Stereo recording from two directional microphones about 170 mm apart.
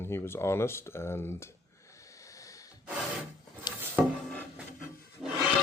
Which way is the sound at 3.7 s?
25° left (ahead or behind).